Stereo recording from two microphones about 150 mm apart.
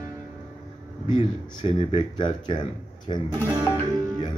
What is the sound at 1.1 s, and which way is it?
A man's voice, 35° left (ahead or behind).